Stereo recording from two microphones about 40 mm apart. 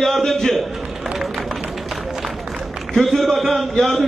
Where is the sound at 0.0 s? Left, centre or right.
Centre.